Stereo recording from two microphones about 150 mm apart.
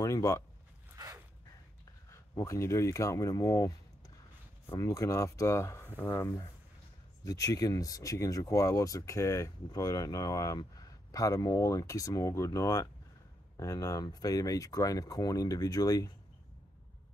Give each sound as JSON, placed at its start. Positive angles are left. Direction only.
{"t": 0.0, "sound": "a sound", "side_deg": 20}
{"t": 0.9, "sound": "dog", "side_deg": -25}
{"t": 2.0, "sound": "speech", "side_deg": 20}